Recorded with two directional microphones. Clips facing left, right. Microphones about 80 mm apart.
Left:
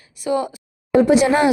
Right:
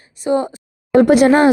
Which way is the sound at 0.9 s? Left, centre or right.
Right.